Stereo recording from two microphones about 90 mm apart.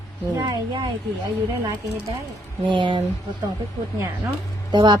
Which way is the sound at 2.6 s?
60° right (ahead or behind).